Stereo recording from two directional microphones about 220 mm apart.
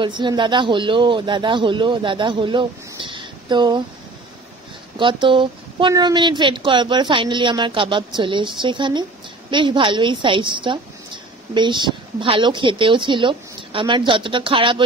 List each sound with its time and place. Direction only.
0.0 s a woman's voice: 20° right (ahead or behind)
4.9 s a woman's voice: 20° right (ahead or behind)